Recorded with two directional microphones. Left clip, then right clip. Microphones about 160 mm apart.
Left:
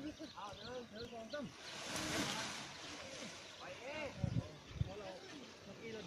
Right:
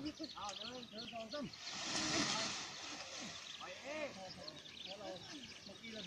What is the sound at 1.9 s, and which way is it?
Speech, 25° left (ahead or behind).